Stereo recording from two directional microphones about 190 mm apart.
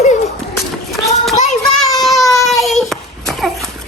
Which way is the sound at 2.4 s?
Centre (ahead or behind).